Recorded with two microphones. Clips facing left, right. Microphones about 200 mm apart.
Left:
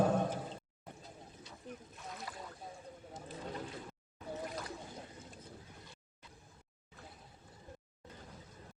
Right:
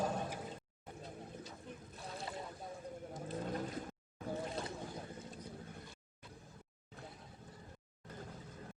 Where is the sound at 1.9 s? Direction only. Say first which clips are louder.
Right 2 dB; 30° right (ahead or behind).